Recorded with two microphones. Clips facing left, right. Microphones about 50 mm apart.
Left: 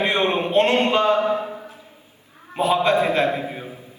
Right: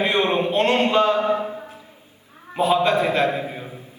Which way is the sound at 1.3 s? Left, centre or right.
Right.